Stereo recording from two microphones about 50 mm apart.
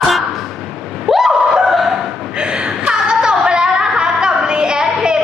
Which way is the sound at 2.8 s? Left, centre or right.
Centre.